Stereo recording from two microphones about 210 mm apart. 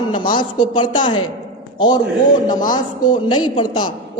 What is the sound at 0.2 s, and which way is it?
A man's voice, 20° left (ahead or behind).